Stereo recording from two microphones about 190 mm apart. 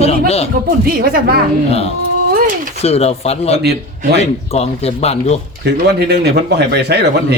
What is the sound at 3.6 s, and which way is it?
Speech, 60° right (ahead or behind).